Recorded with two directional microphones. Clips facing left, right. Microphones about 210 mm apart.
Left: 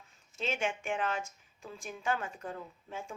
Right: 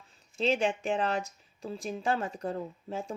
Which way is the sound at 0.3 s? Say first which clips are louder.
Right 7 dB; 35° right (ahead or behind).